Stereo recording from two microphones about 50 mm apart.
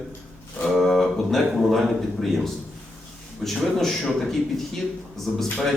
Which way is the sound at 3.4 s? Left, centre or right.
Centre.